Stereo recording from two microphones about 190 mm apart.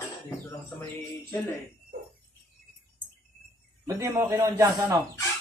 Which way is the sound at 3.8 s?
15° right (ahead or behind).